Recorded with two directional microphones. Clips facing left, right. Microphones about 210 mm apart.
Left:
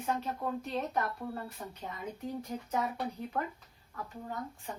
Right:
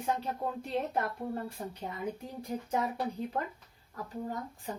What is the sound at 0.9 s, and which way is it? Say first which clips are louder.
Speech: right 1 dB; 30° right (ahead or behind).